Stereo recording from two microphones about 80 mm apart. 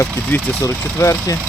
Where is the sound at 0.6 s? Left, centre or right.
Left.